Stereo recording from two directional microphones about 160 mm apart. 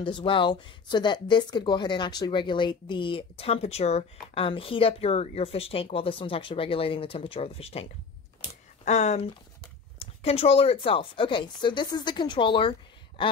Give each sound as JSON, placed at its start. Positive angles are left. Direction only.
{"t": 0.0, "sound": "speech", "side_deg": 30}